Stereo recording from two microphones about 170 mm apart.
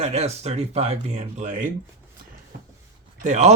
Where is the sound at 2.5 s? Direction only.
65° right (ahead or behind).